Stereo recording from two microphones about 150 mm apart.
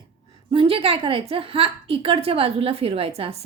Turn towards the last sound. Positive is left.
turn(degrees=-40)  # may be behind; listen again after turning